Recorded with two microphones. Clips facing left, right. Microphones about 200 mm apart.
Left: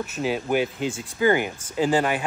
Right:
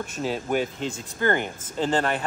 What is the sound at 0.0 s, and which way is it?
Speech, 5° left (ahead or behind).